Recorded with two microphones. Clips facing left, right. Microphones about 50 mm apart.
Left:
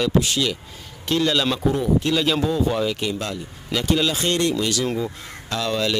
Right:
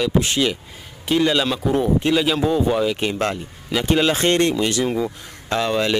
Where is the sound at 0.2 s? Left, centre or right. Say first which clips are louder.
Right 3 dB; right.